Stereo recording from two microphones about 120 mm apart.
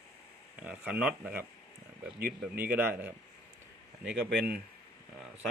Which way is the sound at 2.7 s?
15° right (ahead or behind).